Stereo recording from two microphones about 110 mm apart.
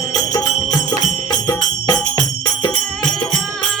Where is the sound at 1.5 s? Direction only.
35° left (ahead or behind).